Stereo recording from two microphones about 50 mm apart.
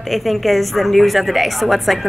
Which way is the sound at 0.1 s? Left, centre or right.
Centre.